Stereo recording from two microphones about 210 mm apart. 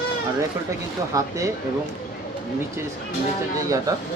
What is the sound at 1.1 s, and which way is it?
Speech, 15° right (ahead or behind).